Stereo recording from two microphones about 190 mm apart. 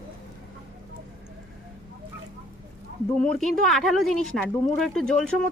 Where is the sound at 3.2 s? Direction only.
5° left (ahead or behind).